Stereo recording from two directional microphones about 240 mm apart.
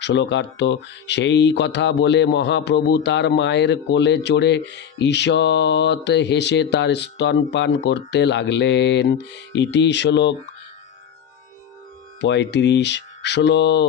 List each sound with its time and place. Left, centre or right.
0.0 s speech: left
12.2 s speech: left